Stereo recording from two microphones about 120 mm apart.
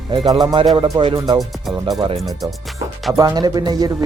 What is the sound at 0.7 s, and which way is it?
Speech, 45° right (ahead or behind).